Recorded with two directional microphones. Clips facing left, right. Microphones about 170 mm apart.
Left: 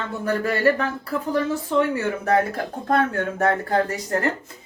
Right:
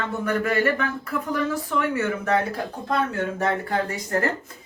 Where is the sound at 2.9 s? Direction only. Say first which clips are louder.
Left 4 dB; 50° left (ahead or behind).